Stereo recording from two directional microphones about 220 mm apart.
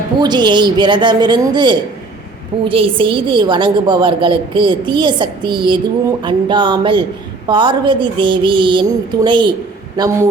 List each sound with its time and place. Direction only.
0.2 s a woman's voice: 20° right (ahead or behind)